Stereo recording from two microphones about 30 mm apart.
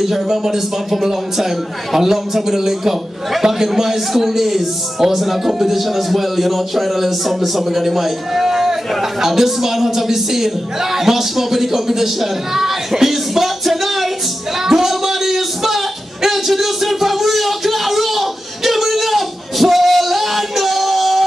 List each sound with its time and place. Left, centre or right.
0.3 s a man's voice: centre
2.0 s a man's voice: centre
14.6 s music: centre